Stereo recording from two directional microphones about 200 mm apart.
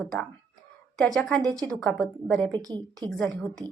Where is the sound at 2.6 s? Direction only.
20° right (ahead or behind).